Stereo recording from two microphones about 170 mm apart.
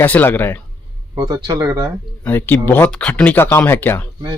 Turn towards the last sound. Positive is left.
turn(degrees=15)  # may be behind; listen again after turning